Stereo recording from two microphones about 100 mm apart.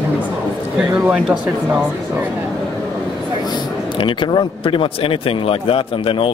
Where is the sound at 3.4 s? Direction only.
50° left (ahead or behind).